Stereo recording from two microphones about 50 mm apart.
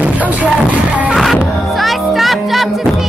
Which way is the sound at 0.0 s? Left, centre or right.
Right.